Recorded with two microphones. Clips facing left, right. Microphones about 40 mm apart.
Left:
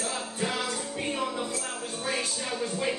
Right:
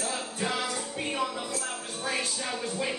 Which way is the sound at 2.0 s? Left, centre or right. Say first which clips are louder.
Even; centre.